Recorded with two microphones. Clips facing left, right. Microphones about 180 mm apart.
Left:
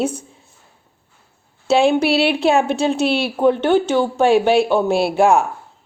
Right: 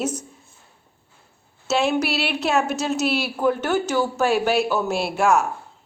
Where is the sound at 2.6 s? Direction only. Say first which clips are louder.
Left 5 dB; 30° left (ahead or behind).